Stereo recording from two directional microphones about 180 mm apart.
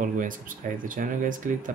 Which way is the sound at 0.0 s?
50° right (ahead or behind).